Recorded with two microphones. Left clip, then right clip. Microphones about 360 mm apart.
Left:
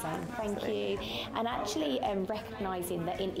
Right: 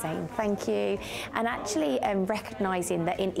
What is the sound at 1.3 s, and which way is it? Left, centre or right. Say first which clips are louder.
A woman's voice: right 5 dB; right.